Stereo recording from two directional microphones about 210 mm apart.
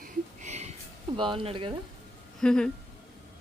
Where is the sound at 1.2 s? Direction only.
25° right (ahead or behind).